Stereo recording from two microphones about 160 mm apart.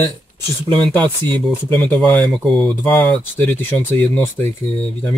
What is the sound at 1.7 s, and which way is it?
Speech, 10° left (ahead or behind).